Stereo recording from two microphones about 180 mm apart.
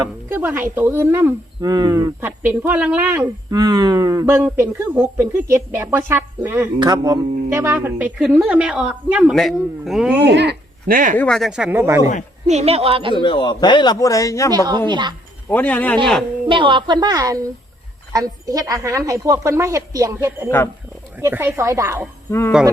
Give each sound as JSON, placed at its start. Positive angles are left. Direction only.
{"t": 0.3, "sound": "speech", "side_deg": -10}
{"t": 3.6, "sound": "a woman's voice", "side_deg": -20}
{"t": 10.2, "sound": "speech", "side_deg": -70}
{"t": 11.2, "sound": "speech", "side_deg": 0}
{"t": 12.5, "sound": "speech", "side_deg": -35}
{"t": 13.1, "sound": "a man's voice", "side_deg": 25}
{"t": 14.5, "sound": "a woman's voice", "side_deg": -20}
{"t": 15.4, "sound": "speech", "side_deg": 10}
{"t": 16.5, "sound": "a woman's voice", "side_deg": -25}
{"t": 22.3, "sound": "speech", "side_deg": 15}